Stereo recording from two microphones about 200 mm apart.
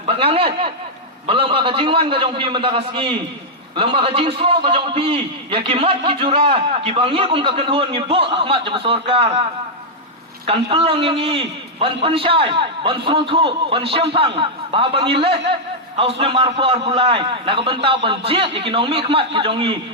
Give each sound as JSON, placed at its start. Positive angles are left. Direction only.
{"t": 0.2, "sound": "a man's voice", "side_deg": -30}
{"t": 10.4, "sound": "a man's voice", "side_deg": -30}